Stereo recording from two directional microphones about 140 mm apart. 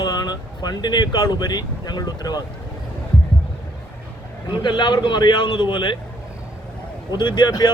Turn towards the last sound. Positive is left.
turn(degrees=30)  # may be behind; listen again after turning